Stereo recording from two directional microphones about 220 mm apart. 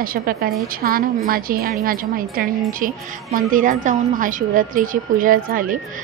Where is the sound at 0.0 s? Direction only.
40° right (ahead or behind).